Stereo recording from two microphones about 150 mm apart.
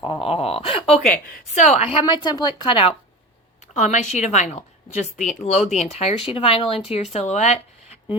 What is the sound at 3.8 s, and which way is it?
Speech, 55° left (ahead or behind).